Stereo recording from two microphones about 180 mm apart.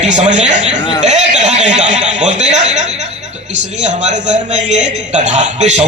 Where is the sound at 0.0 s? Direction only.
40° right (ahead or behind).